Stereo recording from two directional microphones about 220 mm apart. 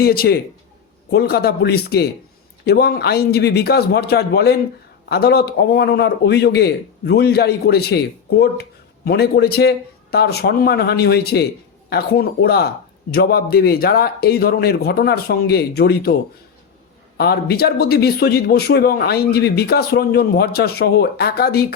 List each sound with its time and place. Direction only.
0.0 s speech: 45° left (ahead or behind)
17.2 s speech: 45° left (ahead or behind)